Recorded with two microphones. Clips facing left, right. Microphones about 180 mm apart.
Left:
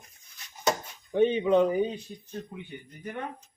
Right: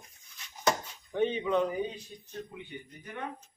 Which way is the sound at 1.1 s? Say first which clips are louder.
Left 6 dB; 20° left (ahead or behind).